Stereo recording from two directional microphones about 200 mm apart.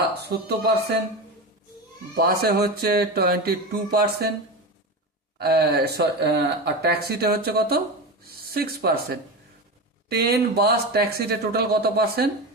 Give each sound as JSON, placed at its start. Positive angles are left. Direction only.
{"t": 0.2, "sound": "speech", "side_deg": -55}
{"t": 2.1, "sound": "speech", "side_deg": -50}
{"t": 5.4, "sound": "speech", "side_deg": -55}